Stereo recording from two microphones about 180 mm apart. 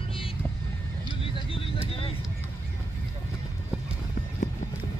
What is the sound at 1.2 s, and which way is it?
Vehicle, 30° left (ahead or behind).